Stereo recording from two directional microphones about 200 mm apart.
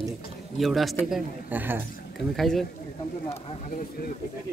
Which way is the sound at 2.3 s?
Centre (ahead or behind).